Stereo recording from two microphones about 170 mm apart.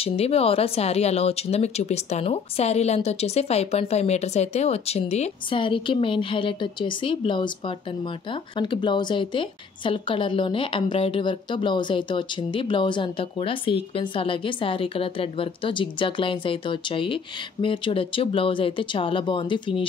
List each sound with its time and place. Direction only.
0.0 s a woman's voice: 35° left (ahead or behind)